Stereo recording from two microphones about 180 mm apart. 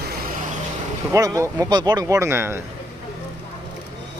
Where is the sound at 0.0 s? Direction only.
60° right (ahead or behind).